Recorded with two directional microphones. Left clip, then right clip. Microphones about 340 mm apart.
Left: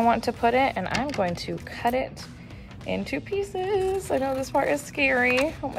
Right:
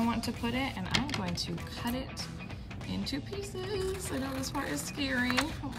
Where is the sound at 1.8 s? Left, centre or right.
Left.